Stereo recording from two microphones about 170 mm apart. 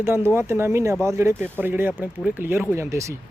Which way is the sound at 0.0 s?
15° right (ahead or behind).